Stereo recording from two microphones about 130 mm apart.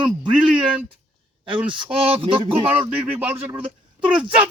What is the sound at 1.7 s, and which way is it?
Speech, 40° right (ahead or behind).